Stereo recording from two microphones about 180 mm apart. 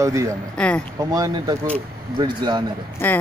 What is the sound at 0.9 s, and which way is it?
Speech, 20° right (ahead or behind).